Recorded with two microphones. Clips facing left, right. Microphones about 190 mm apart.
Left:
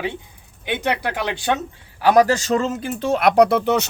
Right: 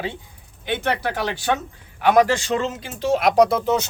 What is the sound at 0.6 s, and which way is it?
Speech, 15° left (ahead or behind).